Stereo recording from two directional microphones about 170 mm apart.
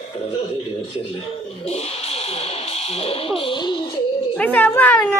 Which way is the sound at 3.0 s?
30° left (ahead or behind).